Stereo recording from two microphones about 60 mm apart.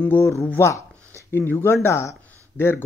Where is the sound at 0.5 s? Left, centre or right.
Left.